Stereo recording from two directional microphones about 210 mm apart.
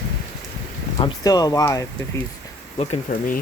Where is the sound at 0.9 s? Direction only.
20° left (ahead or behind).